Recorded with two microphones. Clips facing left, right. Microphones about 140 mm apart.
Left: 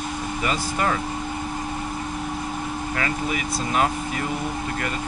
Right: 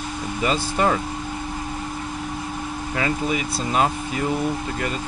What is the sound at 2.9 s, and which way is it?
Speech, 25° right (ahead or behind).